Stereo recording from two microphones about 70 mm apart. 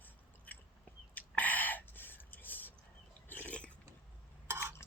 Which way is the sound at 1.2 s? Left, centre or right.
Left.